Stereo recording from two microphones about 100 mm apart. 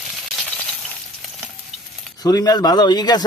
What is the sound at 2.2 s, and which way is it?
Speech, 35° left (ahead or behind).